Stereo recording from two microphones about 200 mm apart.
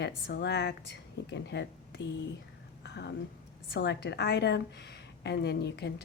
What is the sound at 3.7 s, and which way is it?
Speech, 60° left (ahead or behind).